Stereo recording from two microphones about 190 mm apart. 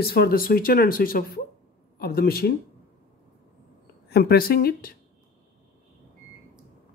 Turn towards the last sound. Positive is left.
turn(degrees=50)  # may be behind; listen again after turning